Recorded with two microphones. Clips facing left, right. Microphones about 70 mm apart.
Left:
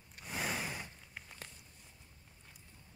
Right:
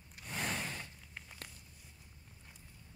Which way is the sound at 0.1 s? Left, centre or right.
Centre.